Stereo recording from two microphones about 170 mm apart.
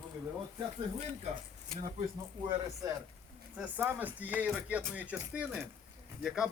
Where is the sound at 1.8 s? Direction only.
45° right (ahead or behind).